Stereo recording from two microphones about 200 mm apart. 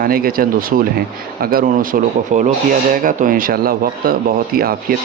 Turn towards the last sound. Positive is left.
turn(degrees=-45)  # may be behind; listen again after turning